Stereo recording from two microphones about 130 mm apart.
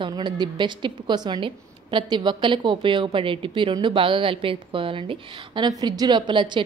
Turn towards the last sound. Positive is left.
turn(degrees=-35)  # may be behind; listen again after turning